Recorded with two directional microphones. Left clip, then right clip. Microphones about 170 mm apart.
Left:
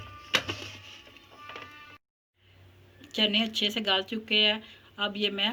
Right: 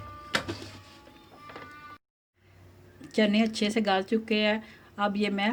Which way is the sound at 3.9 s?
55° right (ahead or behind).